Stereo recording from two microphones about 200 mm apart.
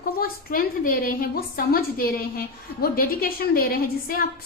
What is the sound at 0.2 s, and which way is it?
A woman's voice, 45° left (ahead or behind).